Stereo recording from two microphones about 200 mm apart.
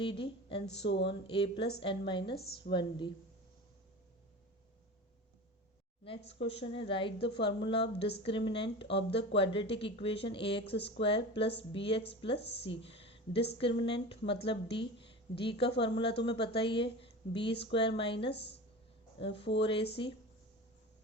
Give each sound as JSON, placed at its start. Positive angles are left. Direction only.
{"t": 0.0, "sound": "a woman's voice", "side_deg": 25}
{"t": 0.9, "sound": "speech", "side_deg": 60}
{"t": 1.3, "sound": "a woman's voice", "side_deg": 25}
{"t": 6.1, "sound": "a woman's voice", "side_deg": 30}
{"t": 7.9, "sound": "speech", "side_deg": 55}
{"t": 8.2, "sound": "a woman's voice", "side_deg": 25}
{"t": 10.8, "sound": "speech", "side_deg": 60}
{"t": 11.0, "sound": "a woman's voice", "side_deg": 30}
{"t": 12.8, "sound": "a sound", "side_deg": 30}
{"t": 13.6, "sound": "a woman's voice", "side_deg": 25}
{"t": 18.3, "sound": "speech", "side_deg": 55}
{"t": 19.2, "sound": "a woman's voice", "side_deg": 30}